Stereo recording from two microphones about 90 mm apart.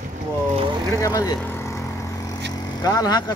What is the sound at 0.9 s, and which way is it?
Speech, 40° left (ahead or behind).